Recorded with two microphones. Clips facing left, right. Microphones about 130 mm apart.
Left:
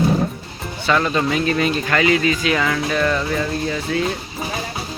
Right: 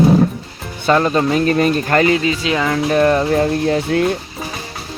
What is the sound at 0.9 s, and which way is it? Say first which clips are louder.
Speech: right 4 dB; 40° right (ahead or behind).